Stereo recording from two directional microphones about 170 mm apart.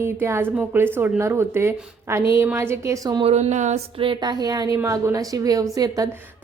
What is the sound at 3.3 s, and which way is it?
A woman's voice, 40° right (ahead or behind).